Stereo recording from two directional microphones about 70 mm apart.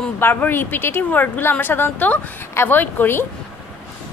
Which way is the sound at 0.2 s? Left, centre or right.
Left.